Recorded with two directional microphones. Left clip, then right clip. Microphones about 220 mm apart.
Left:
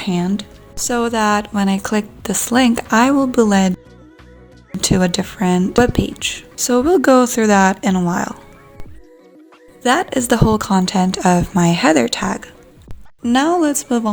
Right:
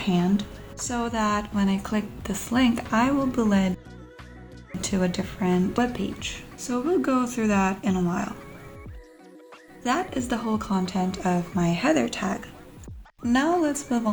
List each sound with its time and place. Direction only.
0.0 s speech: 40° left (ahead or behind)
4.8 s speech: 45° left (ahead or behind)
9.8 s speech: 50° left (ahead or behind)